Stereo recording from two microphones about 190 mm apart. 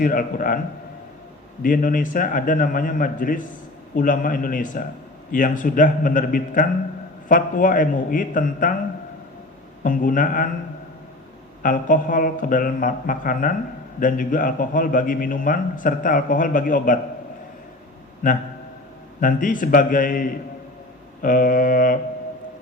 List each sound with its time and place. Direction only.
0.0 s a man's voice: 45° left (ahead or behind)
1.6 s a man's voice: 45° left (ahead or behind)
9.8 s a man's voice: 45° left (ahead or behind)
11.6 s a man's voice: 45° left (ahead or behind)
19.2 s a man's voice: 45° left (ahead or behind)